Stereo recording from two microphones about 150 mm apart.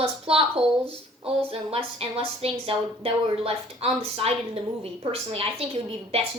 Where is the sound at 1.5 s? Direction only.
40° right (ahead or behind).